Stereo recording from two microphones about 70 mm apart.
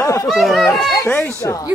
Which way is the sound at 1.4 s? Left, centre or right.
Left.